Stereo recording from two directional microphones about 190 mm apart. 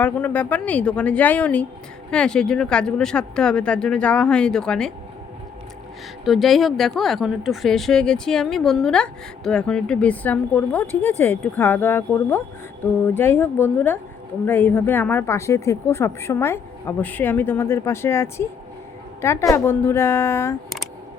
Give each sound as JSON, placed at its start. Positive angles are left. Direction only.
{"t": 0.0, "sound": "a woman's voice", "side_deg": 10}
{"t": 6.2, "sound": "a woman's voice", "side_deg": 0}